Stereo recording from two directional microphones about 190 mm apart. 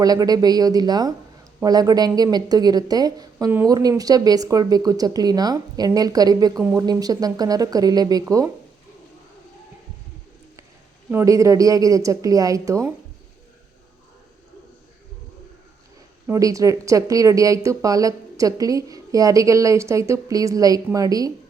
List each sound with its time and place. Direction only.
0.0 s a woman's voice: 20° right (ahead or behind)
11.1 s speech: 15° right (ahead or behind)
16.2 s speech: 15° right (ahead or behind)